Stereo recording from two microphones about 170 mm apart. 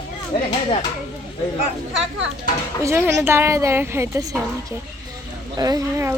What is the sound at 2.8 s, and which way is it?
Speech, 15° right (ahead or behind).